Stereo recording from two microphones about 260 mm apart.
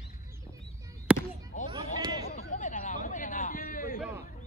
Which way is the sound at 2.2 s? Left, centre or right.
Left.